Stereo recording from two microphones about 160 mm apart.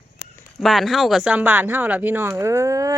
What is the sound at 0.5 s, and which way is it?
Speech, centre (ahead or behind).